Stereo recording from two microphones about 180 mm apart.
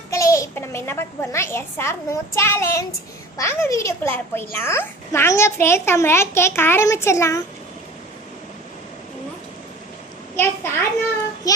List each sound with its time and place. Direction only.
0.1 s a child's voice: 15° left (ahead or behind)
10.3 s a child's voice: 15° left (ahead or behind)
11.4 s child singing: 20° left (ahead or behind)